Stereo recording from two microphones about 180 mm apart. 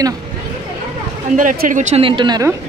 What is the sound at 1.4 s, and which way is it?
Speech, 45° right (ahead or behind).